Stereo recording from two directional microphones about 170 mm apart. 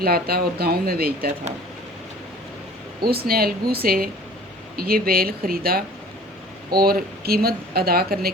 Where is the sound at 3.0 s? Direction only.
65° right (ahead or behind).